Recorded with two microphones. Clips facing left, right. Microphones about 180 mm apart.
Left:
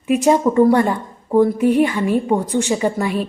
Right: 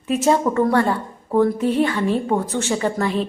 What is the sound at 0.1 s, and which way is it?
A woman's voice, 15° left (ahead or behind).